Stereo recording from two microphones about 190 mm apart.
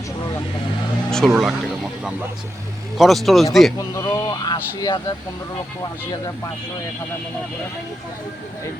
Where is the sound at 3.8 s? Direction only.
15° left (ahead or behind).